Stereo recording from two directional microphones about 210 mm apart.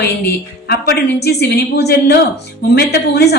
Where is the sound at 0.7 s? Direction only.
50° left (ahead or behind).